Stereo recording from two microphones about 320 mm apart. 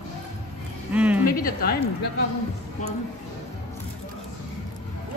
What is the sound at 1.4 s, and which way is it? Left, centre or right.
Speech, left.